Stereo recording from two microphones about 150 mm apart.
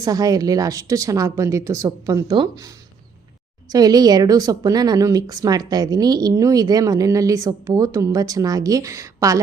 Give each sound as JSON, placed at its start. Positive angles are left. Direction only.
{"t": 0.0, "sound": "a woman's voice", "side_deg": -25}